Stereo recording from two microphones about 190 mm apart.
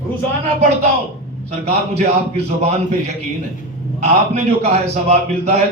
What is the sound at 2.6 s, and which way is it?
A man's voice, 35° right (ahead or behind).